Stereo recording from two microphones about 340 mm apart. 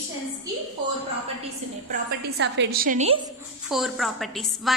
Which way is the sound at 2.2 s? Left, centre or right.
Right.